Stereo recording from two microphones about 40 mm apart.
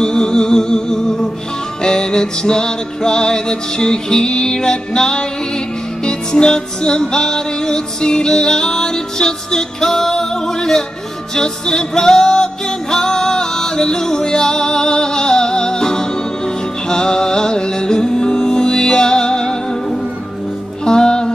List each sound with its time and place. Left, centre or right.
0.0 s music: centre